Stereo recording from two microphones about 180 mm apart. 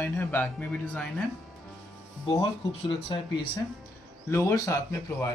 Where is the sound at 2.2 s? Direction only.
25° left (ahead or behind).